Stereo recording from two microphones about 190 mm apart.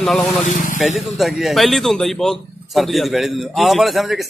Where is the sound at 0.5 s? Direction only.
45° left (ahead or behind).